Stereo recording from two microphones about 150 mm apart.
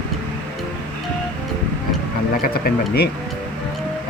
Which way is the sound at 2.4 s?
90° left.